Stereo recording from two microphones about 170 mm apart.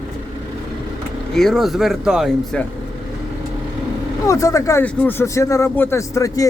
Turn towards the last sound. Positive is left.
turn(degrees=20)  # may be behind; listen again after turning